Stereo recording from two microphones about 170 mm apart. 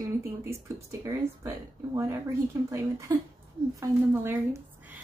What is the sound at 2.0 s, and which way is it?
Speech, 15° right (ahead or behind).